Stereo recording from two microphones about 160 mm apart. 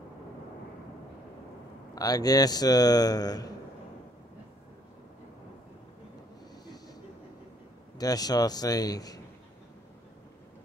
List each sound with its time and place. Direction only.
2.0 s speech: 25° left (ahead or behind)
8.0 s speech: 25° left (ahead or behind)